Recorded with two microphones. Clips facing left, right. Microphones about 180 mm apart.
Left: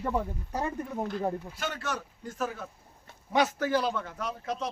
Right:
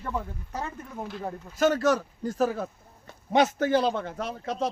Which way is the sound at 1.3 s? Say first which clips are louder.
Left 4 dB; 10° left (ahead or behind).